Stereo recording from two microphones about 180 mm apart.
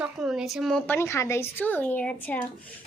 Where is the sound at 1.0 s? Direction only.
15° left (ahead or behind).